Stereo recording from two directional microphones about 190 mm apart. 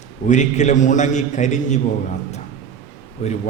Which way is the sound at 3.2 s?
35° left (ahead or behind).